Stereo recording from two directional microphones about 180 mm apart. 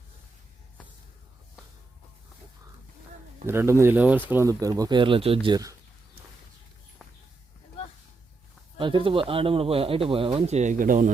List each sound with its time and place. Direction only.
3.4 s speech: 15° right (ahead or behind)
8.8 s speech: 25° right (ahead or behind); by 11.1 s 45° right (ahead or behind)